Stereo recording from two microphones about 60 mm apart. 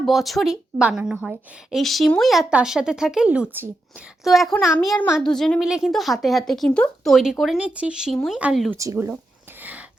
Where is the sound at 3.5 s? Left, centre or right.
Right.